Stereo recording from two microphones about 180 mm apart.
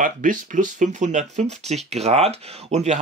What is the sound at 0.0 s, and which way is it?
Speech, 45° right (ahead or behind).